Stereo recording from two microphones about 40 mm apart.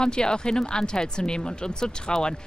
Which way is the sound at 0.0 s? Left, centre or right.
Centre.